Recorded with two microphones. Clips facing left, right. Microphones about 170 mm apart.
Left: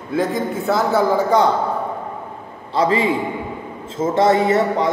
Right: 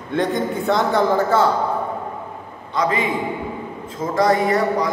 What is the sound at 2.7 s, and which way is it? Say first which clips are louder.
A man's voice: left 3 dB; 30° left (ahead or behind).